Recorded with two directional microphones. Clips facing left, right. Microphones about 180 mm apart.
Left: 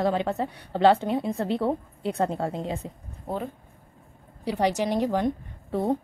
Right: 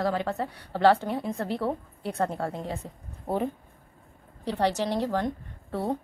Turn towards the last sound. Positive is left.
turn(degrees=15)  # may be behind; listen again after turning